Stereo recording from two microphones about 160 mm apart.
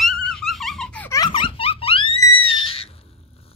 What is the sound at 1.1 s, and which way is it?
Giggle, 25° left (ahead or behind).